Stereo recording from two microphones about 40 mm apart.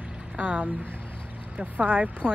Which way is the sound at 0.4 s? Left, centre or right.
Right.